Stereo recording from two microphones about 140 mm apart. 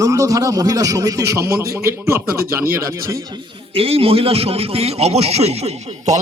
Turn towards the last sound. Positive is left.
turn(degrees=-55)  # may be behind; listen again after turning